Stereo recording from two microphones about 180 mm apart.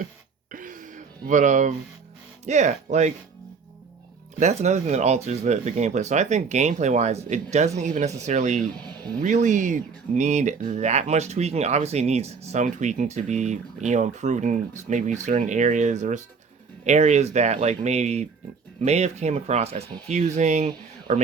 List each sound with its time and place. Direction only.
0.5 s a sound: 45° right (ahead or behind)
2.4 s speech: 40° right (ahead or behind)
4.4 s speech: 40° right (ahead or behind)